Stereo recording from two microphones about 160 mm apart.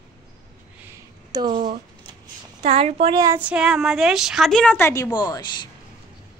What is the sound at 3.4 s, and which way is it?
A woman's voice, 5° right (ahead or behind).